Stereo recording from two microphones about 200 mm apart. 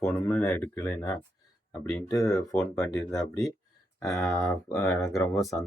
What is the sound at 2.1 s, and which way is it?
Speech, 15° left (ahead or behind).